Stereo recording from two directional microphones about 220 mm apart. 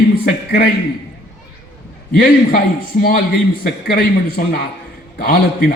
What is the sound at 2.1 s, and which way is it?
Speech, 40° left (ahead or behind).